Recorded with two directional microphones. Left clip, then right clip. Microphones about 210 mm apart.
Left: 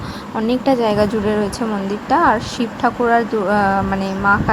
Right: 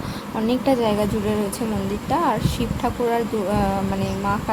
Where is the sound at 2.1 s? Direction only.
15° left (ahead or behind).